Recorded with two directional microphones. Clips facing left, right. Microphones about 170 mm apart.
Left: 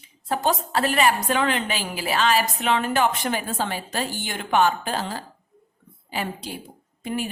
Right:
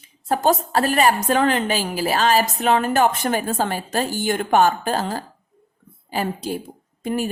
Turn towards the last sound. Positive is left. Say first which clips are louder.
# right 4 dB
turn(degrees=-45)  # may be behind; listen again after turning